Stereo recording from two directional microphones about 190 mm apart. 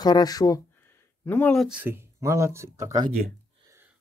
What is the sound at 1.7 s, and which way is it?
Speech, 10° right (ahead or behind).